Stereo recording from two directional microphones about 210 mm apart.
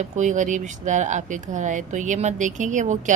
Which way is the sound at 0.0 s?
35° right (ahead or behind).